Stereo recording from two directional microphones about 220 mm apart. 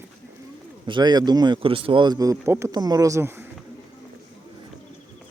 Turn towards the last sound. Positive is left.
turn(degrees=-10)  # may be behind; listen again after turning